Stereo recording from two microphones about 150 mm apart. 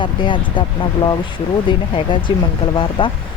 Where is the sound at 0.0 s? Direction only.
35° left (ahead or behind).